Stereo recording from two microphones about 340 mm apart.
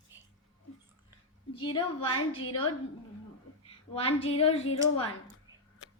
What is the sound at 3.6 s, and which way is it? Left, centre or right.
A woman's voice, centre.